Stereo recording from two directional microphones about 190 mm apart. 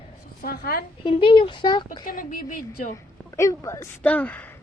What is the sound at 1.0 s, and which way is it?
Speech, 25° left (ahead or behind).